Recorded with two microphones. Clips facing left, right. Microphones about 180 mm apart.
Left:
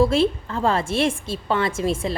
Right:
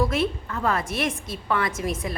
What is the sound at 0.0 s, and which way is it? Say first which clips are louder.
A woman's voice: left 6 dB; 30° left (ahead or behind).